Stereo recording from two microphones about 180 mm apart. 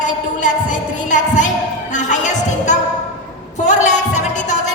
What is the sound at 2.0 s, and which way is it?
Music, 40° left (ahead or behind).